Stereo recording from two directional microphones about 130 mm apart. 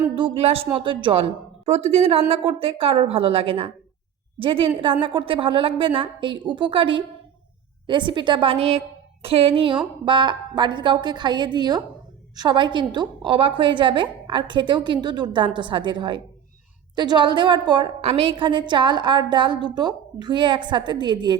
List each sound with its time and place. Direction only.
0.2 s a woman's voice: 45° right (ahead or behind)
18.0 s a woman's voice: 50° right (ahead or behind)